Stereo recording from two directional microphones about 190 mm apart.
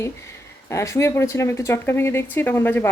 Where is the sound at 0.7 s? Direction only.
15° left (ahead or behind).